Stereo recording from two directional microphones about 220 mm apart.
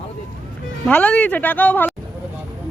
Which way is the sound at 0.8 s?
5° left (ahead or behind).